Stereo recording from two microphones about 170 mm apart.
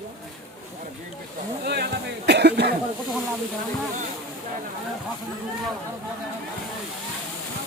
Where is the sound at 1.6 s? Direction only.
70° right (ahead or behind).